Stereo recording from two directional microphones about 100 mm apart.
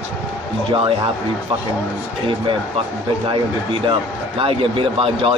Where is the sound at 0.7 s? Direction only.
65° right (ahead or behind).